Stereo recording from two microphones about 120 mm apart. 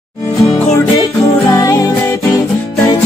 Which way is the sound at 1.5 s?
30° left (ahead or behind).